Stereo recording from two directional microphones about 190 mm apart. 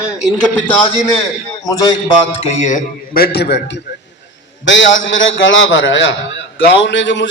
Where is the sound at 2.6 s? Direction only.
40° left (ahead or behind); by 4.0 s 65° left (ahead or behind).